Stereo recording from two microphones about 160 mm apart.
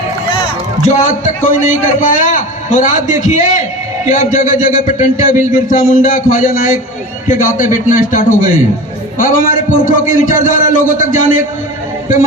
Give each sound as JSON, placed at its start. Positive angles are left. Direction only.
{"t": 0.8, "sound": "a man's voice", "side_deg": 50}